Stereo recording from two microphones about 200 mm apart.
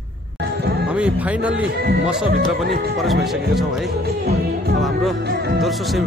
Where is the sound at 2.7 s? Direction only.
50° right (ahead or behind).